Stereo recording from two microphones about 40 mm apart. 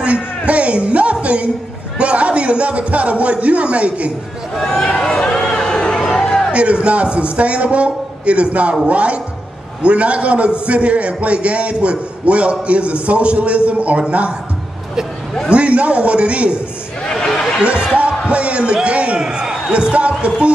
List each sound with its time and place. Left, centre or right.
0.0 s a sound: right
2.0 s a man's voice: right
4.6 s a sound: centre
6.5 s a man's voice: right
15.5 s a man's voice: right
17.3 s a sound: centre
17.9 s speech: right
19.2 s speech: centre
19.7 s speech: right